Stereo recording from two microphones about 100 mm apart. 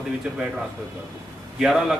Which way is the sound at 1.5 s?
5° right (ahead or behind).